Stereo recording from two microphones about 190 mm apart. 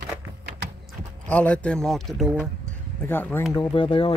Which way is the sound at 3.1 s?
10° left (ahead or behind).